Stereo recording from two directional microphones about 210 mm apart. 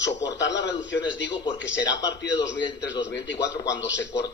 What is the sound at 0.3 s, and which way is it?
A man's voice, 55° left (ahead or behind).